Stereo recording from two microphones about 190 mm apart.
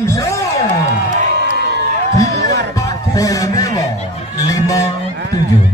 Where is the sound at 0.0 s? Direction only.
15° left (ahead or behind).